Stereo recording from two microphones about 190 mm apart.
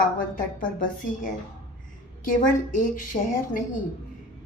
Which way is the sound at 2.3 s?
45° left (ahead or behind).